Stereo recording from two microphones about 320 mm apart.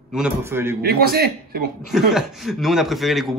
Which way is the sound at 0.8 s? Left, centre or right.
Right.